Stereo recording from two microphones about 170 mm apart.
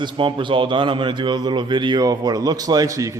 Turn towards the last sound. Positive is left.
turn(degrees=-20)  # may be behind; listen again after turning